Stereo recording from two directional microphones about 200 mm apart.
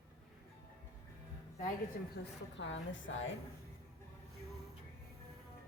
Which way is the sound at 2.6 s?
65° left (ahead or behind).